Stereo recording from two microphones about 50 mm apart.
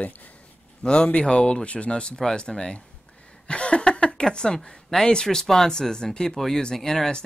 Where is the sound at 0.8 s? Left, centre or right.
Centre.